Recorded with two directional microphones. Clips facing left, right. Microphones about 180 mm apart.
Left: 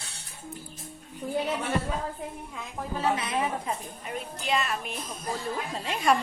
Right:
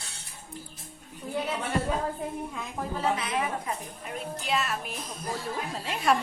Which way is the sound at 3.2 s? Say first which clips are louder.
Even; 30° left (ahead or behind).